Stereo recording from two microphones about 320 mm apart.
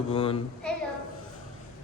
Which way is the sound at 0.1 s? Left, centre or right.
Centre.